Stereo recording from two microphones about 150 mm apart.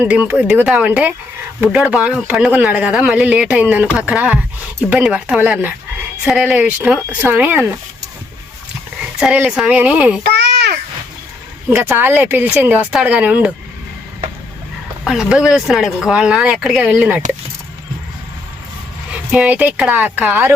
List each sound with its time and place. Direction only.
0.0 s speech: 10° right (ahead or behind)
9.0 s speech: 5° right (ahead or behind)
10.2 s a sound: 90° right
11.7 s speech: 15° right (ahead or behind)
15.0 s speech: 5° right (ahead or behind)
19.1 s speech: 10° right (ahead or behind)